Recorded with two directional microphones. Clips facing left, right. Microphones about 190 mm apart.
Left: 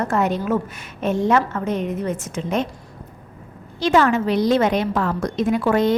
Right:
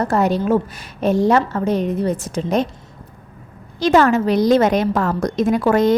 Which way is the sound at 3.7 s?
40° right (ahead or behind).